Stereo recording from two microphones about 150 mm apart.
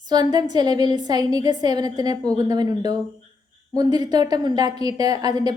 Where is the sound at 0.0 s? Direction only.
30° right (ahead or behind).